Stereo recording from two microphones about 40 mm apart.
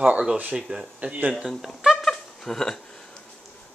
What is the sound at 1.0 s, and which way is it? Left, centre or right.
Speech, right.